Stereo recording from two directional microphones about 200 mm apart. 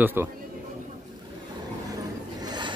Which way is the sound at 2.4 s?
20° right (ahead or behind).